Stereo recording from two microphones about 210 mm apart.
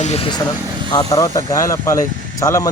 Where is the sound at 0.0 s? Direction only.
30° left (ahead or behind).